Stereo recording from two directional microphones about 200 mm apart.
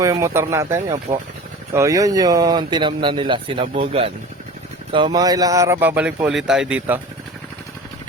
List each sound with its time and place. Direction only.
0.0 s speech: 15° right (ahead or behind)